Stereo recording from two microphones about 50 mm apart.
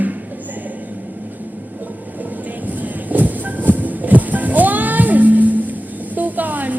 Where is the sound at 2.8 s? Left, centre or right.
Right.